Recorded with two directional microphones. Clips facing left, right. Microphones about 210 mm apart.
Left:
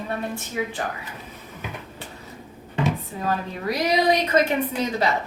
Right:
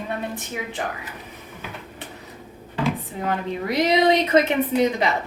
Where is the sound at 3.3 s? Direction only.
25° right (ahead or behind).